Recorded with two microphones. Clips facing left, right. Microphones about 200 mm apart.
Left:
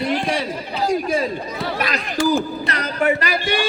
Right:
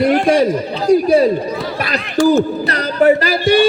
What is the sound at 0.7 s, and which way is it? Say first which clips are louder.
A man's voice: right 7 dB; 35° right (ahead or behind).